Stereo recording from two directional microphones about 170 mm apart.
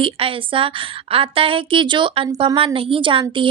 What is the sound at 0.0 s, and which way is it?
A woman's voice, 30° right (ahead or behind).